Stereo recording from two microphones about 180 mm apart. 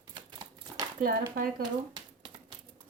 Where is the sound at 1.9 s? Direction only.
25° right (ahead or behind).